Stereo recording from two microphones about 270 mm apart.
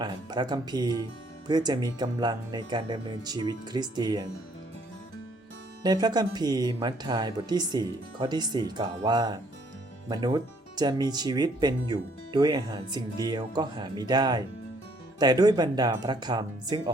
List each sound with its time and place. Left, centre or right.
0.0 s speech: centre
5.8 s speech: centre